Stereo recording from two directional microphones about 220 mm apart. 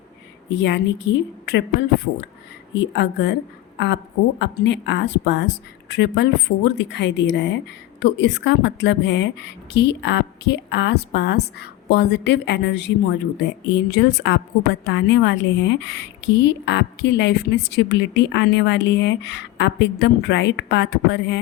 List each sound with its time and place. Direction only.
0.6 s a woman's voice: 55° left (ahead or behind)
2.7 s a woman's voice: 55° left (ahead or behind)